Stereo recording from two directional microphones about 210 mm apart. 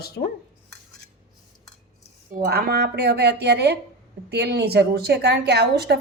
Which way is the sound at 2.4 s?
50° right (ahead or behind).